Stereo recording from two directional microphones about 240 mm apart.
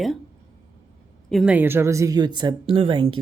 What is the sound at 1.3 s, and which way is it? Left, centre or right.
Speech, centre.